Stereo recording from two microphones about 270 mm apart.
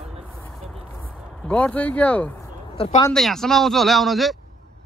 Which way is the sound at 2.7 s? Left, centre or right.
Left.